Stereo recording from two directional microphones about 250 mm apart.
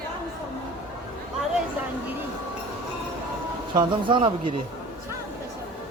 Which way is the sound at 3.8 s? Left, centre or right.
Centre.